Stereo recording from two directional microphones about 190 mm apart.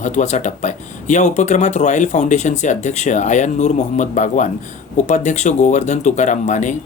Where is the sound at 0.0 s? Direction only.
40° left (ahead or behind).